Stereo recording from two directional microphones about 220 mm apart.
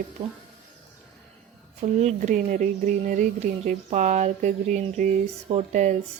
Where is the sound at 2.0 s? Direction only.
30° right (ahead or behind).